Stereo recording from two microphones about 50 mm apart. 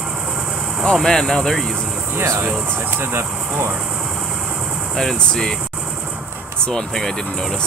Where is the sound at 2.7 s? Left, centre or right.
Right.